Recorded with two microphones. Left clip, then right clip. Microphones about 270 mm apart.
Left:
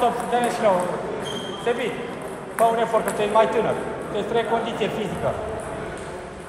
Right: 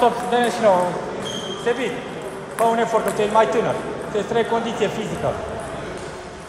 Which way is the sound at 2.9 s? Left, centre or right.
Right.